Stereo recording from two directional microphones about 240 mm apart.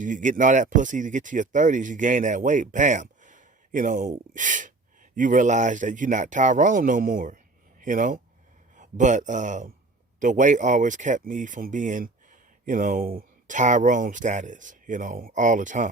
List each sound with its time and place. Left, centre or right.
0.0 s speech: right